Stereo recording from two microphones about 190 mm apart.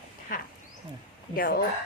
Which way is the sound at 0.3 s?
45° left (ahead or behind).